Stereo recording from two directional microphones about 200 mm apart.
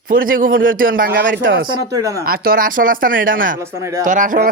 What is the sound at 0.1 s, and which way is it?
A man's voice, 45° right (ahead or behind).